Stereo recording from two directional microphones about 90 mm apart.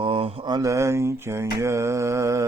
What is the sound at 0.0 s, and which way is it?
Mantra, 70° right (ahead or behind).